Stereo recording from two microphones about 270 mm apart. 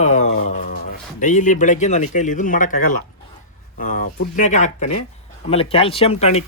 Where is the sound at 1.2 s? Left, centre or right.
Left.